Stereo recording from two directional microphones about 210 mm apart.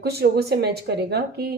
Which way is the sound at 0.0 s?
50° right (ahead or behind).